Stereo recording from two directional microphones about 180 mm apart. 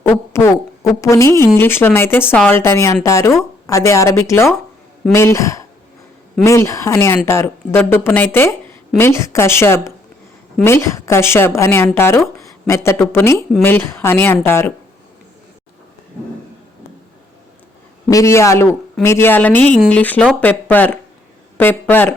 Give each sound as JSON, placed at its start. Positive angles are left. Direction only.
{"t": 0.1, "sound": "owl", "side_deg": 15}
{"t": 1.0, "sound": "speech", "side_deg": 15}
{"t": 18.1, "sound": "speech", "side_deg": 15}